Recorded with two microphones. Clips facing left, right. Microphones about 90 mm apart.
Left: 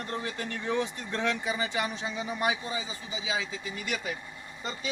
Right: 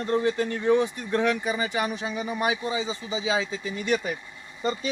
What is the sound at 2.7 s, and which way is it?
Speech, 25° right (ahead or behind).